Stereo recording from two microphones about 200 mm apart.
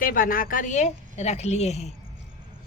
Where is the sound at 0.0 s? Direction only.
45° left (ahead or behind).